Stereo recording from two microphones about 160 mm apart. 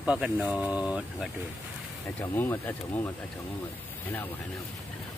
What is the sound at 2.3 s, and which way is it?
Speech, 15° left (ahead or behind).